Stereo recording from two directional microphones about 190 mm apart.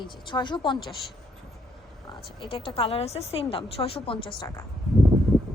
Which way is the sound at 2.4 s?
30° left (ahead or behind).